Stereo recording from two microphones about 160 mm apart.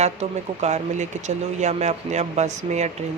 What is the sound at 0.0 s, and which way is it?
Speech, 45° right (ahead or behind).